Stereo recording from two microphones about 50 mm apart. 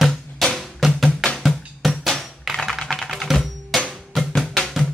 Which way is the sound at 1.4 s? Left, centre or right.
Centre.